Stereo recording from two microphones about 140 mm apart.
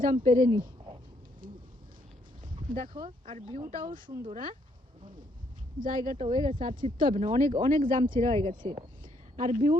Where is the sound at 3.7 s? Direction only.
75° right (ahead or behind).